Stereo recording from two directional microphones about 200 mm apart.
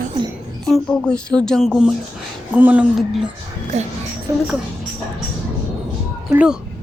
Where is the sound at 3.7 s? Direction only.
35° right (ahead or behind).